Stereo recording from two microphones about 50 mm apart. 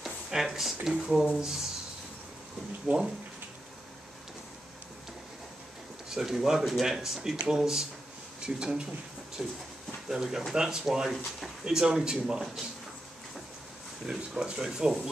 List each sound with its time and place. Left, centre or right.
0.0 s a sound: centre
0.8 s speech: centre
2.9 s speech: right
6.0 s speech: centre
14.0 s speech: centre